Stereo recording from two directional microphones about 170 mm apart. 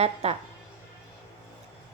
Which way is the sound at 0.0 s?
35° right (ahead or behind).